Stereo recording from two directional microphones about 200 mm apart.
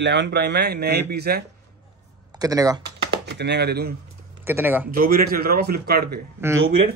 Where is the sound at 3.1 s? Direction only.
55° right (ahead or behind).